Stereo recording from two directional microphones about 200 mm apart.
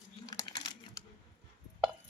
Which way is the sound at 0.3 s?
20° left (ahead or behind).